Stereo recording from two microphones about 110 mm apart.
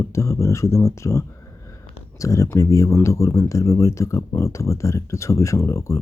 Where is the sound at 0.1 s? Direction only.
25° left (ahead or behind).